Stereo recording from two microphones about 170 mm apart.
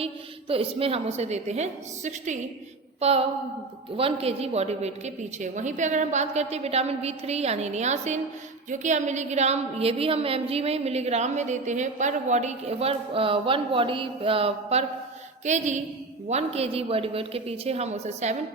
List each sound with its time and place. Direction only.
0.0 s a woman's voice: 35° right (ahead or behind)
15.4 s a sound: 45° right (ahead or behind)
16.3 s a woman's voice: 35° right (ahead or behind)